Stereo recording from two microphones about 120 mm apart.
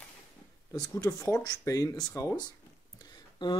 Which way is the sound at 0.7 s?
25° left (ahead or behind).